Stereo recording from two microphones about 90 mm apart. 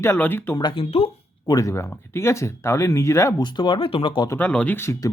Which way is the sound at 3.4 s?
55° left (ahead or behind).